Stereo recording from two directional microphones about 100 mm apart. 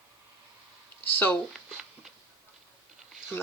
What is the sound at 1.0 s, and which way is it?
Speech, 20° left (ahead or behind).